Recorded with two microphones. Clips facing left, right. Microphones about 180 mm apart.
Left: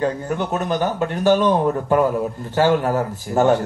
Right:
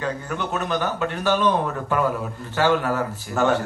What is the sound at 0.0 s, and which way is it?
A man's voice, 45° left (ahead or behind).